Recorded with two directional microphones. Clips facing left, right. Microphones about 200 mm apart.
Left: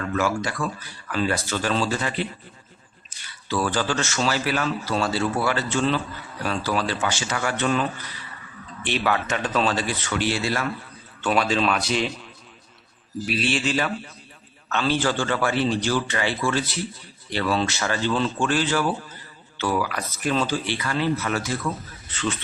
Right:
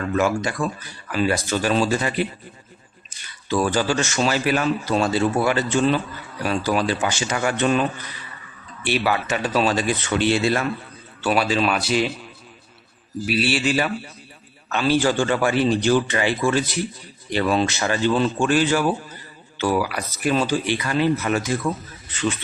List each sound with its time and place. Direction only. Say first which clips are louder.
0.1 s speech: right 4 dB; 20° right (ahead or behind)
8.8 s speech: right 2 dB; 10° right (ahead or behind); by 10.7 s 25° right (ahead or behind)
11.2 s speech: right 2 dB; 5° right (ahead or behind)
13.2 s speech: right 3 dB; 5° right (ahead or behind)